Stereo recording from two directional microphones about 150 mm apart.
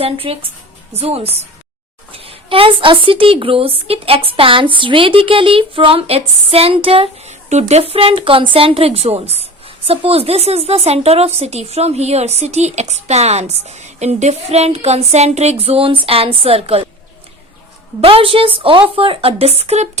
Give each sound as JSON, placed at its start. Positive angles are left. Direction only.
{"t": 0.0, "sound": "a woman's voice", "side_deg": -40}
{"t": 18.0, "sound": "a woman's voice", "side_deg": -40}